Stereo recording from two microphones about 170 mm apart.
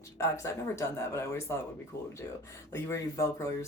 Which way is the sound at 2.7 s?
20° left (ahead or behind).